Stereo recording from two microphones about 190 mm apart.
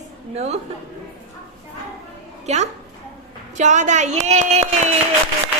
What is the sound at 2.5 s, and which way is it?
A woman's voice, 35° right (ahead or behind).